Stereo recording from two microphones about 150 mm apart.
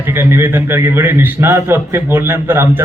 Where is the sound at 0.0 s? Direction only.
15° right (ahead or behind).